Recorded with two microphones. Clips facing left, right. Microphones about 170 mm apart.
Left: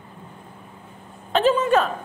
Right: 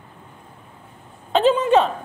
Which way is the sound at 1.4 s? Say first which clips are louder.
Right 2 dB; 20° right (ahead or behind).